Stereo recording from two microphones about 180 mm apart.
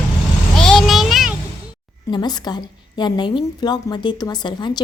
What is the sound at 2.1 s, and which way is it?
A woman's voice, 25° left (ahead or behind).